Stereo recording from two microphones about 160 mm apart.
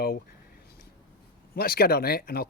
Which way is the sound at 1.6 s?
70° left (ahead or behind).